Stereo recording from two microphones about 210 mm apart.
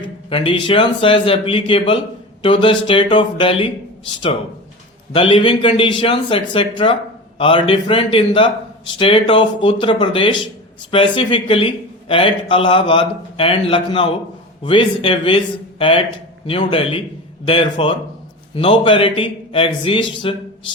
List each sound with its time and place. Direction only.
0.0 s speech: 25° left (ahead or behind)
5.1 s speech: 25° left (ahead or behind)